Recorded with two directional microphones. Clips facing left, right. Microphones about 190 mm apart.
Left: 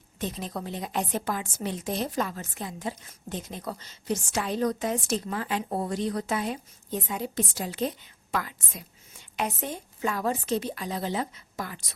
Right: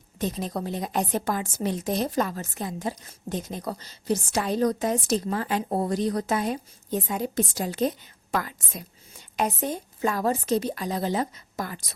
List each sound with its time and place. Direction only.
0.2 s a woman's voice: 40° right (ahead or behind)